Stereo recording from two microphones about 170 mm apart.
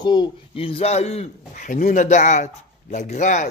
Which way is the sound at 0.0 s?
25° left (ahead or behind).